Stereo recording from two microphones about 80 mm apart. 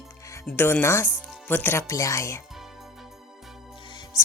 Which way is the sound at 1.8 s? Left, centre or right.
Left.